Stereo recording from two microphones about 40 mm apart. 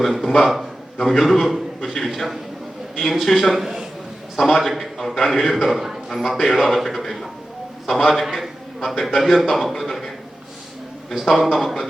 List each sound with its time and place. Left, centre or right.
0.0 s a man's voice: centre
1.8 s a man's voice: centre
3.0 s a man's voice: centre
4.4 s a man's voice: centre
5.5 s a man's voice: left
5.7 s a man's voice: centre
9.2 s a man's voice: centre
9.5 s a man's voice: centre
11.1 s a man's voice: centre